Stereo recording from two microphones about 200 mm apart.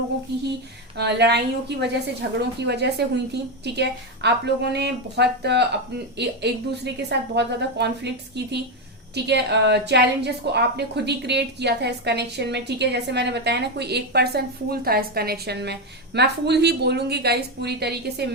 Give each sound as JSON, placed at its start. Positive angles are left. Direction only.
{"t": 0.9, "sound": "a woman's voice", "side_deg": -55}